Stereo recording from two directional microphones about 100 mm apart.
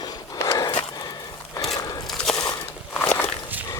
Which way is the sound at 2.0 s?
5° left (ahead or behind).